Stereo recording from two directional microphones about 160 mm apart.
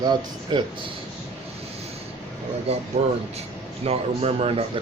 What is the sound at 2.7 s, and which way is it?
A man's voice, 40° right (ahead or behind).